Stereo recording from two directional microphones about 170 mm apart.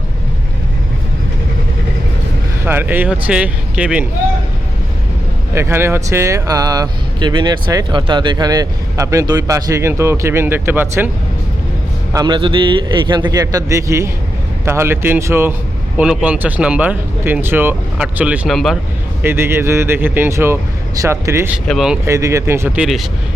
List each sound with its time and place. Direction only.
2.6 s speech: 10° right (ahead or behind)
5.5 s speech: 15° right (ahead or behind)
12.1 s speech: 25° right (ahead or behind); by 18.8 s centre (ahead or behind)
19.2 s speech: 15° right (ahead or behind)
21.7 s speech: centre (ahead or behind)
22.0 s speech: 15° right (ahead or behind)